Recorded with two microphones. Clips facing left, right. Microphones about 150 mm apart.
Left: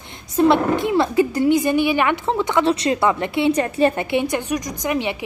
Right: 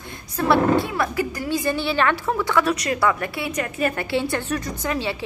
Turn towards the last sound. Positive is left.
turn(degrees=20)  # may be behind; listen again after turning